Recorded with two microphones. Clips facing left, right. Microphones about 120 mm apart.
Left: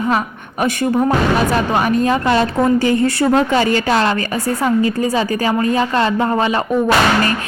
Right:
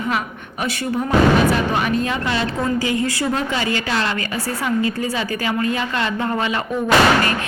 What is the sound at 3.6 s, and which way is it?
A woman's voice, 40° left (ahead or behind).